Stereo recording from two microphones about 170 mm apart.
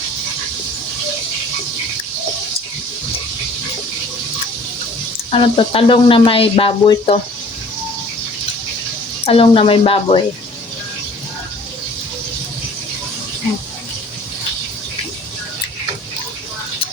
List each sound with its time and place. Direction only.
5.3 s speech: 30° left (ahead or behind)
9.2 s speech: 35° left (ahead or behind)